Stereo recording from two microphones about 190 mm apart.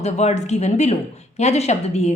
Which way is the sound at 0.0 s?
35° left (ahead or behind).